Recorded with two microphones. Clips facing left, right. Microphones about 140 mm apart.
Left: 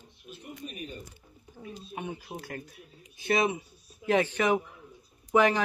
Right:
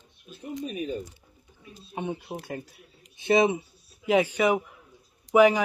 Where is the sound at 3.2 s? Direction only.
25° right (ahead or behind).